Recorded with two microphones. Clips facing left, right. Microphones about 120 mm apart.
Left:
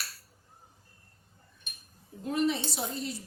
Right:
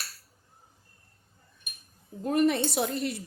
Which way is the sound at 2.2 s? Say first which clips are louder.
Right 5 dB; 55° right (ahead or behind).